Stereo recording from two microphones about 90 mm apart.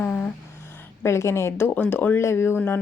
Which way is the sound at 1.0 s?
30° left (ahead or behind).